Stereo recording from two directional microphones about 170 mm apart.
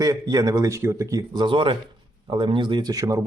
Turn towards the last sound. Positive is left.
turn(degrees=-20)  # may be behind; listen again after turning